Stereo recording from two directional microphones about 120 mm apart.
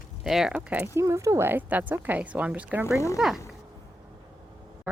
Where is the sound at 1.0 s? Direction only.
25° right (ahead or behind); by 3.4 s 5° right (ahead or behind).